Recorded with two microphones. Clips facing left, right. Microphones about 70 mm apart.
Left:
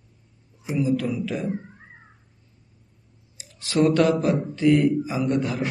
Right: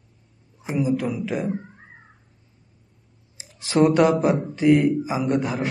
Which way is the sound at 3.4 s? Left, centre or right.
Right.